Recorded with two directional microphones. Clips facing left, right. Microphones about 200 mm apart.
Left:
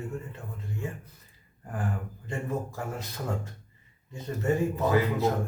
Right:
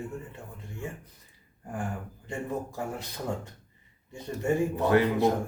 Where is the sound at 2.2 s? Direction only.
15° right (ahead or behind).